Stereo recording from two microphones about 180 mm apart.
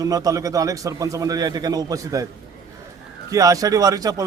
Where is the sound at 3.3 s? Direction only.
20° right (ahead or behind).